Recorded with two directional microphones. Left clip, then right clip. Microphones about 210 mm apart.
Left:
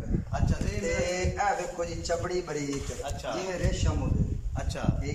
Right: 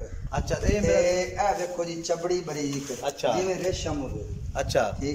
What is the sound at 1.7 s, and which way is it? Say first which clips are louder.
Speech: right 2 dB; 15° right (ahead or behind).